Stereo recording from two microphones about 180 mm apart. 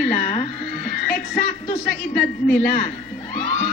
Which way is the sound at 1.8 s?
55° left (ahead or behind).